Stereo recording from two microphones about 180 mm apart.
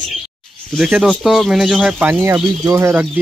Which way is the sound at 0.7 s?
5° right (ahead or behind).